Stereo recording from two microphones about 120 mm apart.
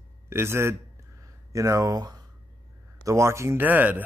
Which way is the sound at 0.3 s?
20° right (ahead or behind).